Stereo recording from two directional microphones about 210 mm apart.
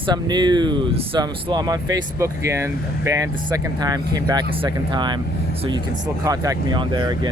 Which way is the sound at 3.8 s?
20° right (ahead or behind).